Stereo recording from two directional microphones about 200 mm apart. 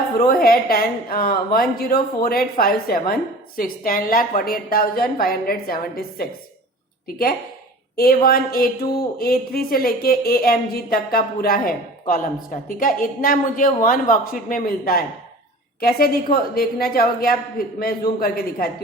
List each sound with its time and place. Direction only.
0.3 s speech: 45° left (ahead or behind)
7.9 s speech: 50° left (ahead or behind)